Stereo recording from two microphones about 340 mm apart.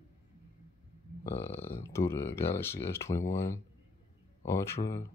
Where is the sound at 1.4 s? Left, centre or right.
Centre.